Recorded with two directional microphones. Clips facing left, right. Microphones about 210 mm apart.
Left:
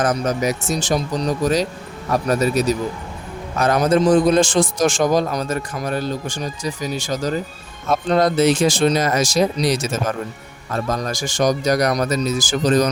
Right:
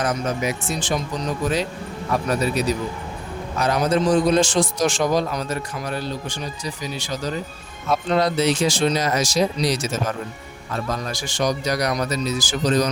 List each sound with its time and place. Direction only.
0.0 s a man's voice: 45° left (ahead or behind)